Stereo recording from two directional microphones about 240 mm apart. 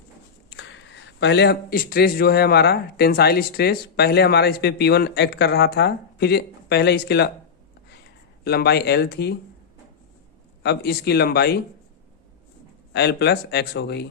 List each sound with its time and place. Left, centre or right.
0.5 s a man's voice: left
8.4 s speech: left
10.6 s speech: left
12.9 s a man's voice: left